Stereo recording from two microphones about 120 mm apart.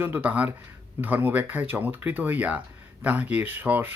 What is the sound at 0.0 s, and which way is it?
Speech, 15° right (ahead or behind).